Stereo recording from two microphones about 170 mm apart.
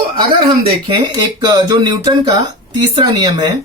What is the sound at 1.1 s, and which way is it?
Speech, 20° right (ahead or behind).